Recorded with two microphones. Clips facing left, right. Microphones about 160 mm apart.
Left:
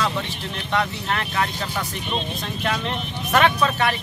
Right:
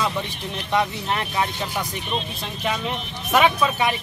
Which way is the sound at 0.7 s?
15° right (ahead or behind).